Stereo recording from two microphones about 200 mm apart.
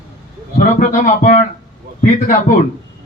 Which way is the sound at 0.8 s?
40° left (ahead or behind).